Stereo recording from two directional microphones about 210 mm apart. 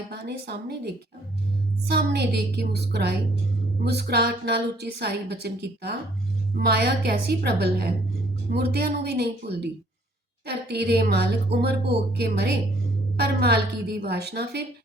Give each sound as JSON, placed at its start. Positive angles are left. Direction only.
{"t": 0.1, "sound": "a woman's voice", "side_deg": -55}
{"t": 1.9, "sound": "a woman's voice", "side_deg": -50}